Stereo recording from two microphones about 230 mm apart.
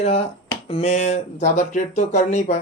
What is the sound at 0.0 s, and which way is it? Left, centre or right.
A man's voice, left.